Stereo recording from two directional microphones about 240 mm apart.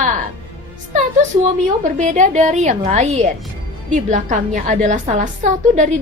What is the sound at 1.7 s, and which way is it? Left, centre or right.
A woman's voice, right.